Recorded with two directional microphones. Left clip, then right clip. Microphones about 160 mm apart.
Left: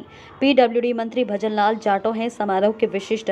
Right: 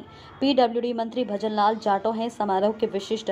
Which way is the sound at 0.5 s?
10° left (ahead or behind).